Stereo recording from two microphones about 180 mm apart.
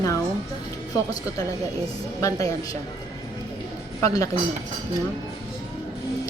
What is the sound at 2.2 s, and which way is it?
Speech, 20° left (ahead or behind).